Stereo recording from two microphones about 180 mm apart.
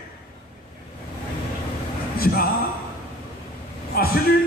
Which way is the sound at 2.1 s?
55° left (ahead or behind).